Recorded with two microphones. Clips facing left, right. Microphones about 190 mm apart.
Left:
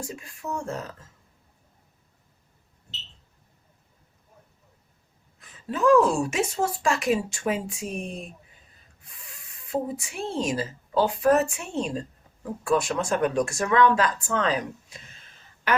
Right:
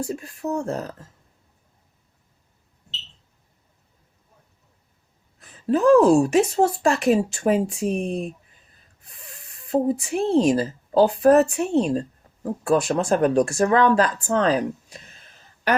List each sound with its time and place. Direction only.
0.0 s a woman's voice: 40° right (ahead or behind)
5.4 s a woman's voice: 40° right (ahead or behind)
9.0 s a sound: 35° right (ahead or behind)
9.6 s a woman's voice: 35° right (ahead or behind)